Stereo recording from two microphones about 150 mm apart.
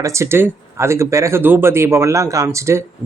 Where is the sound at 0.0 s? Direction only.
20° right (ahead or behind).